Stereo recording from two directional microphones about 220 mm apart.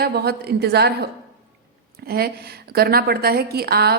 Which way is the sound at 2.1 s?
45° right (ahead or behind).